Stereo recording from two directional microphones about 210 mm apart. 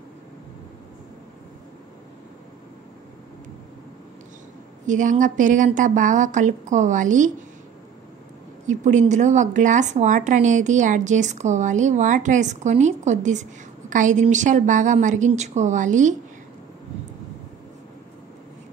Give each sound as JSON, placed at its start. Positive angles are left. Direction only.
{"t": 4.8, "sound": "speech", "side_deg": -35}
{"t": 8.6, "sound": "speech", "side_deg": -35}